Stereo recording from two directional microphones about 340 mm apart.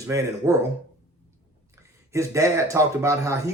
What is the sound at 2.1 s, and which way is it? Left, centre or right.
Speech, centre.